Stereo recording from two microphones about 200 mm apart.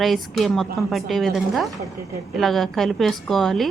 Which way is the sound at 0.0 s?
Centre (ahead or behind).